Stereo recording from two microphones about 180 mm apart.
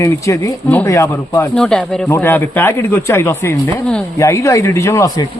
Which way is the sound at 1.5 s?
5° left (ahead or behind).